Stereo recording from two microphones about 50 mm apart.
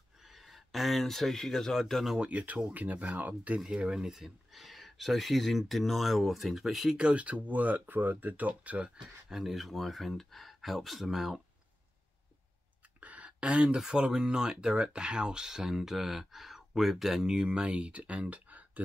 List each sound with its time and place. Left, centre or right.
0.2 s speech: centre
2.1 s speech: right
3.7 s speech: centre
7.0 s speech: right
9.3 s speech: centre
13.0 s a sound: right
13.7 s speech: centre; by 18.7 s right